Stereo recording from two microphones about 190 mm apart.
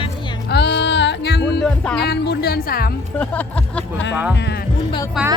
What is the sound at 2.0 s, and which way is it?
Speech, 60° left (ahead or behind).